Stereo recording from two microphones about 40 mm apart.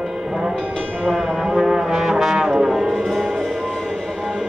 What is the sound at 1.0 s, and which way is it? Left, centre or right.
Music, centre.